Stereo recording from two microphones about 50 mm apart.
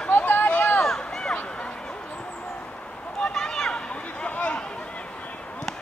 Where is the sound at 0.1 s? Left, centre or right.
Left.